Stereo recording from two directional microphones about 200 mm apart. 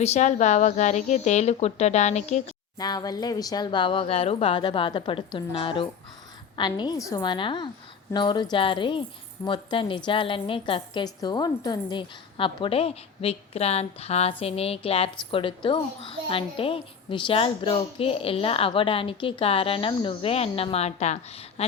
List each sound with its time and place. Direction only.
0.0 s speech: 35° left (ahead or behind)
2.7 s a child's voice: 20° left (ahead or behind)